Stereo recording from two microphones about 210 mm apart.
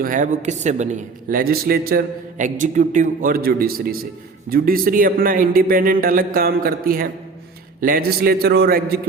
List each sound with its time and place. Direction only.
0.0 s speech: 40° right (ahead or behind)